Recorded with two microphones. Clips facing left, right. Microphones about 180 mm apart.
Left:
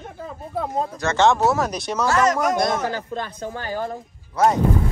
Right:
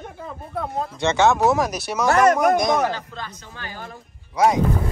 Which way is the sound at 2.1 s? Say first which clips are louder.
Right 4 dB; 55° right (ahead or behind).